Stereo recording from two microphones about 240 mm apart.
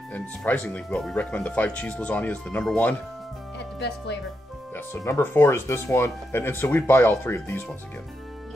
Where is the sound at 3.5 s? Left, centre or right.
Left.